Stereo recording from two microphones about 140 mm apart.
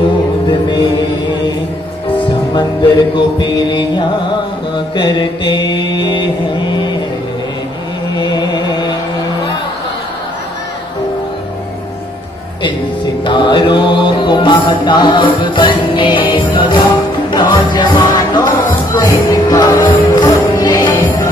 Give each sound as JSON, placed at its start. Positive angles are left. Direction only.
{"t": 0.5, "sound": "music", "side_deg": 30}
{"t": 3.2, "sound": "music", "side_deg": 30}
{"t": 6.7, "sound": "vehicle", "side_deg": 30}
{"t": 8.1, "sound": "music", "side_deg": 30}
{"t": 13.2, "sound": "music", "side_deg": 35}